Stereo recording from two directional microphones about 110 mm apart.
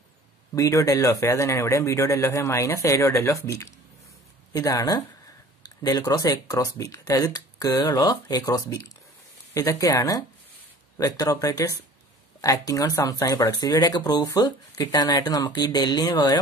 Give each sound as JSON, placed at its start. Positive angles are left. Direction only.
{"t": 0.6, "sound": "speech", "side_deg": 30}